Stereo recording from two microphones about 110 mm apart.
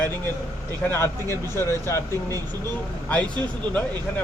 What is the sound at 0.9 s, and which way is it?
Speech, 25° left (ahead or behind).